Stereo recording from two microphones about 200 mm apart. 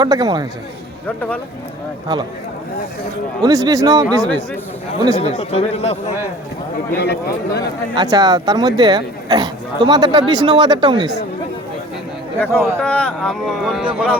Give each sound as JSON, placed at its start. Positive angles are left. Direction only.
{"t": 0.0, "sound": "speech", "side_deg": -20}
{"t": 3.4, "sound": "speech", "side_deg": -20}
{"t": 5.1, "sound": "speech", "side_deg": 30}
{"t": 6.9, "sound": "speech", "side_deg": 55}
{"t": 7.9, "sound": "speech", "side_deg": -20}
{"t": 12.4, "sound": "speech", "side_deg": 5}